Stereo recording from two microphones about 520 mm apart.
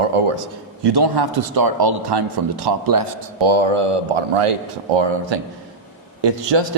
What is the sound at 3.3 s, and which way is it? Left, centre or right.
Speech, right.